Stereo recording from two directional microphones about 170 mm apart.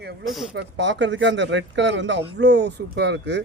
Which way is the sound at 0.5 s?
90° right.